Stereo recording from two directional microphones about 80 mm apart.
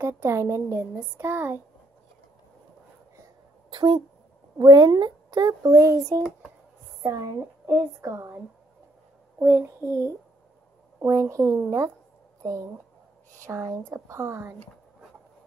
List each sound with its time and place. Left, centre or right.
0.0 s speech: right
3.7 s a woman's voice: right
4.6 s speech: right
5.5 s a child's voice: right
9.4 s speech: right
13.4 s speech: right